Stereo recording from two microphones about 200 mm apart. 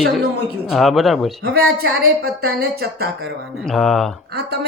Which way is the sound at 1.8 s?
50° right (ahead or behind).